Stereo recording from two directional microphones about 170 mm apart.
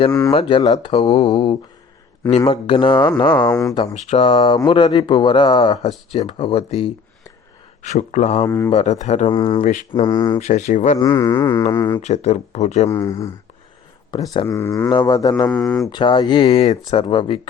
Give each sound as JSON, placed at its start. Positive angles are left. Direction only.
{"t": 0.1, "sound": "speech", "side_deg": 20}
{"t": 0.3, "sound": "speech", "side_deg": 30}
{"t": 3.9, "sound": "speech", "side_deg": 40}
{"t": 8.4, "sound": "speech", "side_deg": 15}
{"t": 8.7, "sound": "speech", "side_deg": 40}
{"t": 10.4, "sound": "speech", "side_deg": 45}
{"t": 10.9, "sound": "speech", "side_deg": 20}
{"t": 12.0, "sound": "speech", "side_deg": 40}
{"t": 12.9, "sound": "speech", "side_deg": 20}
{"t": 15.4, "sound": "speech", "side_deg": 5}
{"t": 15.9, "sound": "speech", "side_deg": 25}